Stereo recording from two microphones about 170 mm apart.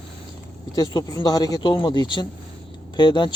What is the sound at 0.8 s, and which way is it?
Speech, 20° left (ahead or behind).